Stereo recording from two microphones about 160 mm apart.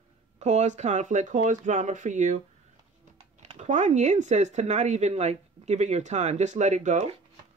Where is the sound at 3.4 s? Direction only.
45° right (ahead or behind).